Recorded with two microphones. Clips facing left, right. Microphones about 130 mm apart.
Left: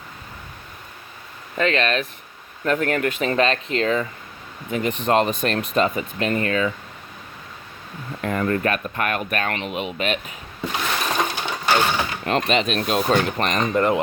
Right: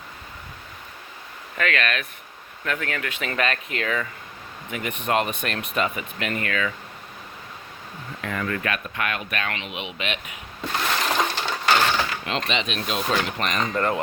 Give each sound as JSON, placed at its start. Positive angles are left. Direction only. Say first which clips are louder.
{"t": 1.5, "sound": "speech", "louder": "left 5 dB", "side_deg": 30}
{"t": 2.6, "sound": "speech", "louder": "left 8 dB", "side_deg": 40}
{"t": 8.2, "sound": "speech", "louder": "left 6 dB", "side_deg": 40}
{"t": 11.2, "sound": "a sound", "louder": "left 1 dB", "side_deg": 15}
{"t": 12.2, "sound": "speech", "louder": "left 6 dB", "side_deg": 45}
{"t": 13.6, "sound": "speech", "louder": "left 5 dB", "side_deg": 20}